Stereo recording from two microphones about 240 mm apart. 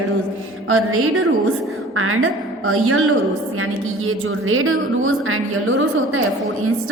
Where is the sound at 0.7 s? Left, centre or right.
Right.